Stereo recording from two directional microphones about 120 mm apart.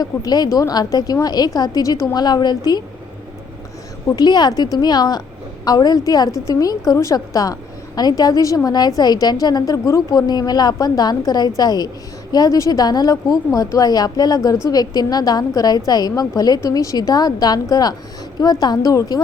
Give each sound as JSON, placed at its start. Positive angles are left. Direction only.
{"t": 0.0, "sound": "a woman's voice", "side_deg": 35}
{"t": 4.1, "sound": "a woman's voice", "side_deg": 35}